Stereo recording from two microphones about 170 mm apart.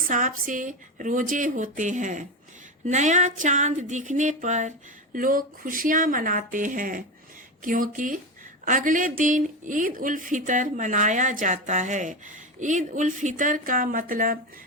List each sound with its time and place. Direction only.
0.1 s speech: 50° right (ahead or behind)